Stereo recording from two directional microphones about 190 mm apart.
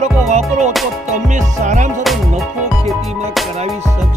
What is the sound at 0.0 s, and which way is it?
Music, 35° right (ahead or behind).